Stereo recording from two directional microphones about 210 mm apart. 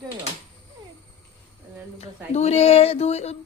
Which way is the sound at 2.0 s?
30° left (ahead or behind).